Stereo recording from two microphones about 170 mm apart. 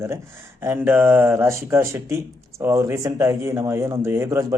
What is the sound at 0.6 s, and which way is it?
A man's voice, 15° right (ahead or behind).